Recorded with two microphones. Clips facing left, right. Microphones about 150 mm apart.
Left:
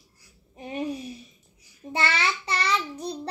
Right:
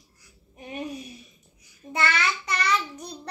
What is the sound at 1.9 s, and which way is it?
Child singing, 30° left (ahead or behind).